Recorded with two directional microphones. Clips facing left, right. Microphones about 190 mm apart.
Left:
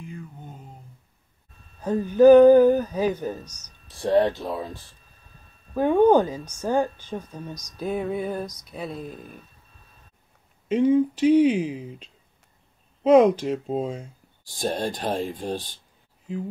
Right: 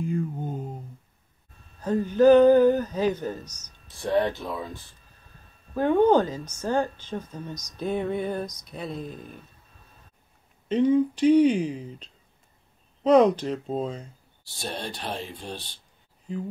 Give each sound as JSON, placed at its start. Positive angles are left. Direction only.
{"t": 0.1, "sound": "a sound", "side_deg": -45}
{"t": 1.8, "sound": "speech", "side_deg": 15}
{"t": 4.0, "sound": "speech", "side_deg": 30}
{"t": 5.8, "sound": "speech", "side_deg": 15}
{"t": 10.7, "sound": "speech", "side_deg": 5}
{"t": 14.6, "sound": "speech", "side_deg": 45}